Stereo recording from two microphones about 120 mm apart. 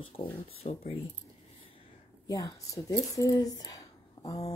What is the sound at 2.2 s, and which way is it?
Speech, 30° left (ahead or behind).